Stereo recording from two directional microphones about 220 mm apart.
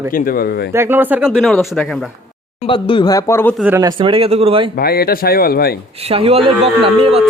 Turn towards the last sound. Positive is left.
turn(degrees=-25)  # may be behind; listen again after turning